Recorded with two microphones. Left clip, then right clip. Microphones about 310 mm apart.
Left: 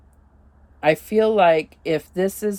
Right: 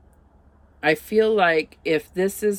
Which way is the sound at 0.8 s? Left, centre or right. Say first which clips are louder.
Left 1 dB; centre.